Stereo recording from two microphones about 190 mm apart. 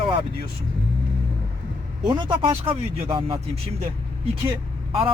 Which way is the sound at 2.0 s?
25° right (ahead or behind).